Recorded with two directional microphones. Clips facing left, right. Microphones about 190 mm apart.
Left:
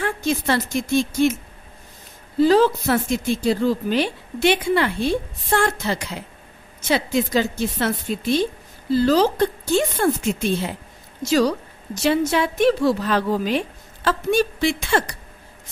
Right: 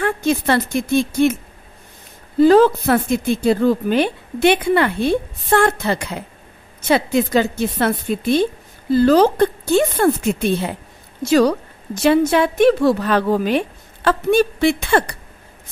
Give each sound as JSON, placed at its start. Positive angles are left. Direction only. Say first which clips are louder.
{"t": 0.0, "sound": "a woman's voice", "louder": "right 4 dB", "side_deg": -60}